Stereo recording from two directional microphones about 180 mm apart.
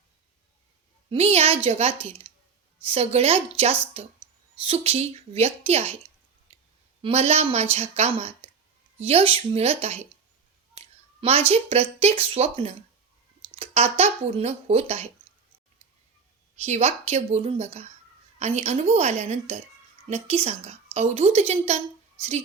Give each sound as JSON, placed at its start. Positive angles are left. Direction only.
{"t": 1.1, "sound": "speech", "side_deg": -35}
{"t": 6.5, "sound": "clicking", "side_deg": -35}
{"t": 7.0, "sound": "speech", "side_deg": -35}
{"t": 16.6, "sound": "speech", "side_deg": -35}